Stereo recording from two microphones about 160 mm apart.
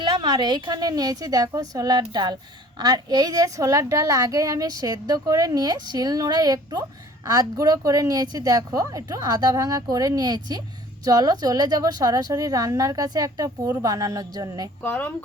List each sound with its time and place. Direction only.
0.0 s a woman's voice: 30° right (ahead or behind)
14.8 s speech: 10° left (ahead or behind)